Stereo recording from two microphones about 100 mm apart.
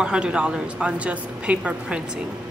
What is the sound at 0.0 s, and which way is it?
A woman's voice, 10° right (ahead or behind).